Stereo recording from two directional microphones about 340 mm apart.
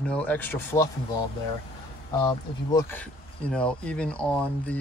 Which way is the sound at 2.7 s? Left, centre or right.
Centre.